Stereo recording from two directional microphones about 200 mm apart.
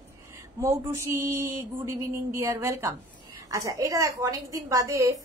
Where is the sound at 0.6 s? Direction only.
15° right (ahead or behind).